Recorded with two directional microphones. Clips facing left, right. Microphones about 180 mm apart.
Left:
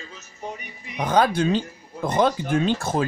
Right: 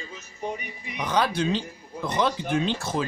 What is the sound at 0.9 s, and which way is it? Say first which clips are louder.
Speech: left 5 dB; 50° left (ahead or behind).